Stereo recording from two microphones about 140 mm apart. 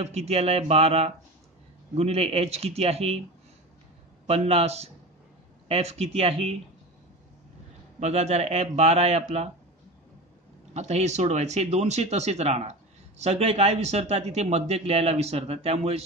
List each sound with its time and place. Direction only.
0.0 s a man's voice: 50° right (ahead or behind)
4.3 s a man's voice: 45° right (ahead or behind)
8.0 s a man's voice: 50° right (ahead or behind)
10.7 s a man's voice: 50° right (ahead or behind)